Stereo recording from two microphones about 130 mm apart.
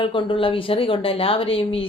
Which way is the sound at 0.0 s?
40° left (ahead or behind).